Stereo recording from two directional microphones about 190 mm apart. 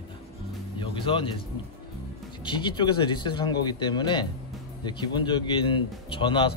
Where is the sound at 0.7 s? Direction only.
25° left (ahead or behind).